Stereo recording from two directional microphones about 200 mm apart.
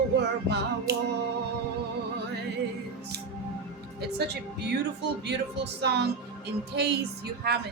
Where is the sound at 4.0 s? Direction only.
55° right (ahead or behind).